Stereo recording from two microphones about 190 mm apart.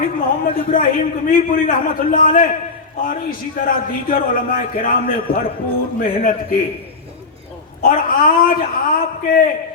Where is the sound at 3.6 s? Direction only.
50° left (ahead or behind).